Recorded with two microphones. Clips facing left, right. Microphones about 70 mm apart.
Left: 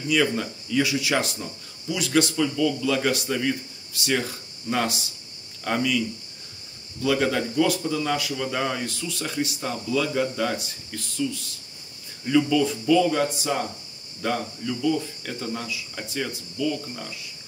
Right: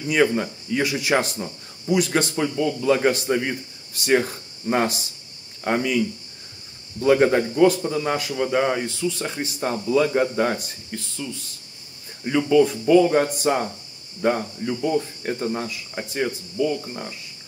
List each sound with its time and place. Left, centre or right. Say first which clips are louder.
0.2 s a man's voice: right 4 dB; right
0.8 s speech: right 3 dB; right
5.6 s speech: right 3 dB; right
7.0 s a man's voice: right 6 dB; right
10.9 s a man's voice: right 3 dB; centre
12.3 s a man's voice: right 3 dB; right
12.8 s speech: right 4 dB; right
14.2 s speech: right 5 dB; right